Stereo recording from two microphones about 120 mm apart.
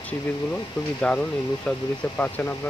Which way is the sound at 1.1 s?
10° left (ahead or behind).